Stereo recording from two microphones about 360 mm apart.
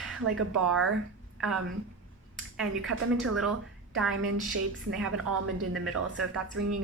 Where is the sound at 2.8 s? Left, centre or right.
Right.